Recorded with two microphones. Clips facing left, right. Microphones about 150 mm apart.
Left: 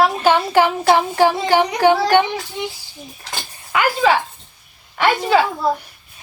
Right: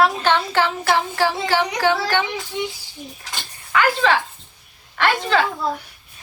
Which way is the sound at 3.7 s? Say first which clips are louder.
Left 2 dB; 10° left (ahead or behind).